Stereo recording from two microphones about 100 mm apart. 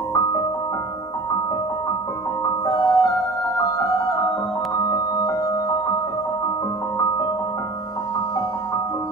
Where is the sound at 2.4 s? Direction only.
40° left (ahead or behind).